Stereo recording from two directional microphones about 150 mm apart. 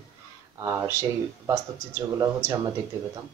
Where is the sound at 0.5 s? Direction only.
20° right (ahead or behind).